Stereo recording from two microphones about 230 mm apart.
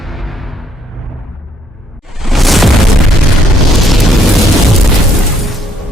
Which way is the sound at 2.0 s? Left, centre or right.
Centre.